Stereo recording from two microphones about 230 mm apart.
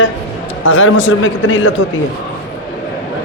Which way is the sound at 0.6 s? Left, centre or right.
Left.